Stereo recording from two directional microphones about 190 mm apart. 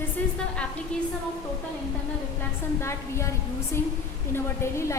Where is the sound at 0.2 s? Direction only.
10° left (ahead or behind).